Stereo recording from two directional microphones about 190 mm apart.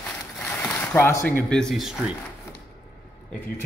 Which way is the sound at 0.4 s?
10° left (ahead or behind).